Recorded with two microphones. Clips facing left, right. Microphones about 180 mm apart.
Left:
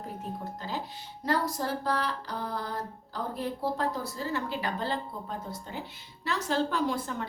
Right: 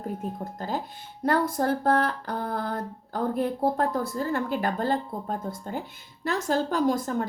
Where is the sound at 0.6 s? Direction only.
50° right (ahead or behind).